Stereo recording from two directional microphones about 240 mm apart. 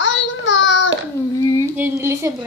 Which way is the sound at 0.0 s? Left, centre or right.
Left.